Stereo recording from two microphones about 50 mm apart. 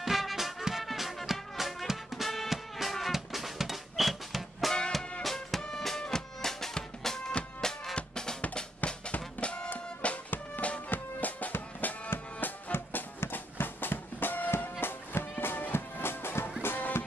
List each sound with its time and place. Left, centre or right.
0.0 s music: centre
7.9 s drum: centre
8.5 s music: left
9.7 s music: left